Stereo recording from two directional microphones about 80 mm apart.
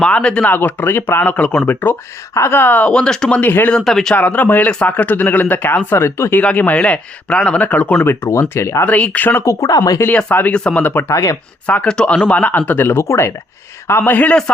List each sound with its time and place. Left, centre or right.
0.0 s speech: centre
0.4 s speech: left
3.7 s speech: centre
4.1 s speech: centre
6.4 s speech: centre
8.0 s speech: left
8.9 s speech: centre
9.4 s speech: left
10.5 s speech: centre
11.1 s speech: left
11.6 s speech: centre